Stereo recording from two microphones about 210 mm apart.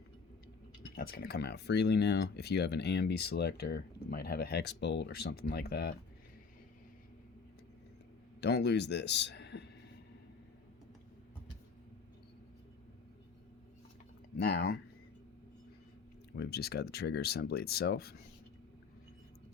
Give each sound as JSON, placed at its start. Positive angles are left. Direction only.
{"t": 0.9, "sound": "speech", "side_deg": 50}
{"t": 8.4, "sound": "a man's voice", "side_deg": 55}
{"t": 14.3, "sound": "speech", "side_deg": 45}
{"t": 16.3, "sound": "speech", "side_deg": 50}